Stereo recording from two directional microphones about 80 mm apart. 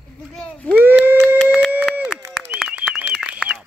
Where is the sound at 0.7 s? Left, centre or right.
Right.